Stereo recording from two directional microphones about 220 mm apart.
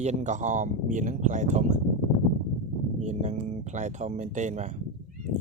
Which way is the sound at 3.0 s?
35° right (ahead or behind).